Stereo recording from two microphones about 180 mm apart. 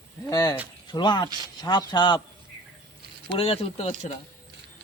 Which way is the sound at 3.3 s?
30° left (ahead or behind).